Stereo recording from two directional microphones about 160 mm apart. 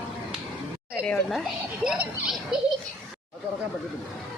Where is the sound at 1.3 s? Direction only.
5° right (ahead or behind).